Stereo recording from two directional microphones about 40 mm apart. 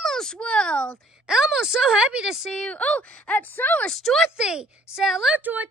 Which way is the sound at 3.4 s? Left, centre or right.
Left.